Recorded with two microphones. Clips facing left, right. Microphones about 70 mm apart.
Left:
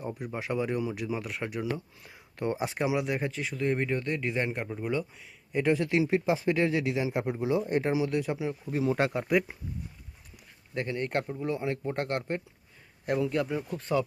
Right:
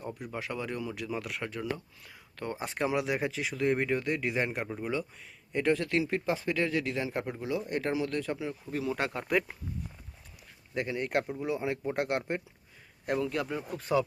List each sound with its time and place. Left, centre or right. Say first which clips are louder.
0.0 s speech: left 2 dB; centre
2.0 s speech: left 6 dB; left
2.7 s speech: left 1 dB; centre; by 9.2 s left
9.2 s speech: left 3 dB; centre
10.8 s speech: even; centre
13.1 s speech: left 3 dB; centre